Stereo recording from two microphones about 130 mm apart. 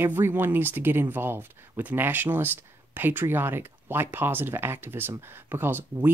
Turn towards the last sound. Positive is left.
turn(degrees=-15)  # may be behind; listen again after turning